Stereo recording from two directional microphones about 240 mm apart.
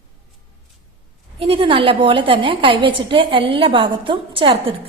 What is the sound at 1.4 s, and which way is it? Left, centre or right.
A woman's voice, right.